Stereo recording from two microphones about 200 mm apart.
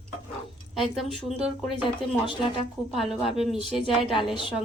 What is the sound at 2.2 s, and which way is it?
Speech, 25° left (ahead or behind).